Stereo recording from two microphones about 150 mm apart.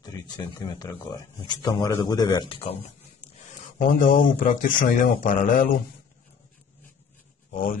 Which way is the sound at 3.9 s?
65° left (ahead or behind).